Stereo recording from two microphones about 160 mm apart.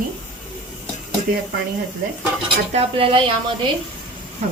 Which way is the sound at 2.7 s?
35° right (ahead or behind).